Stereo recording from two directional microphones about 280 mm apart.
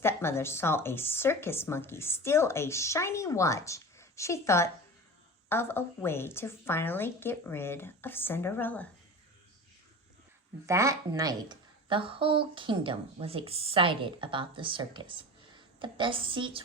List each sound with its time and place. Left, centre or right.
0.0 s speech: centre
10.7 s a woman's voice: centre